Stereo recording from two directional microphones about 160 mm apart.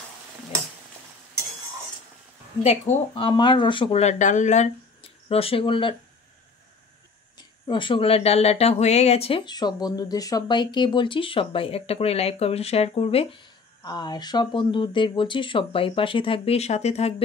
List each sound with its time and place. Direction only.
2.6 s speech: 35° left (ahead or behind)
7.3 s speech: 30° left (ahead or behind)